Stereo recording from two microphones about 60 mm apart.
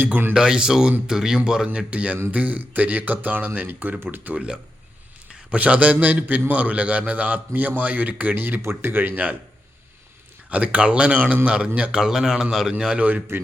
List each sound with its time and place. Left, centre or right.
0.0 s speech: right
0.3 s a man's voice: centre; by 4.4 s right
4.4 s a man's voice: centre; by 9.3 s right
10.5 s a man's voice: right
13.0 s a man's voice: right